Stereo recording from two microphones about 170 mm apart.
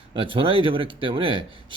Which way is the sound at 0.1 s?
30° right (ahead or behind).